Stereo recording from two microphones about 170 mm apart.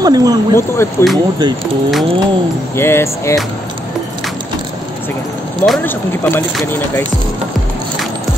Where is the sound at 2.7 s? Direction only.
15° left (ahead or behind).